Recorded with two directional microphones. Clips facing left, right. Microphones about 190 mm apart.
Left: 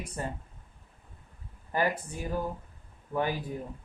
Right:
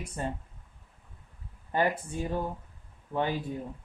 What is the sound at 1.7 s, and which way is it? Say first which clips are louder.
Speech: right 1 dB; 25° right (ahead or behind).